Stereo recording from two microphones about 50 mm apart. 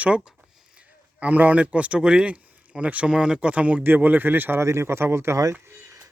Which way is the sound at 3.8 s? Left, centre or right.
Right.